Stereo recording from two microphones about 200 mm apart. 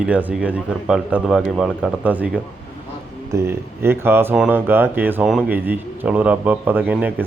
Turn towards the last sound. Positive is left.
turn(degrees=-10)  # may be behind; listen again after turning